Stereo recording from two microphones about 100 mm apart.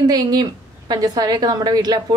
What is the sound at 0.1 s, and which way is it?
A woman's voice, 40° right (ahead or behind).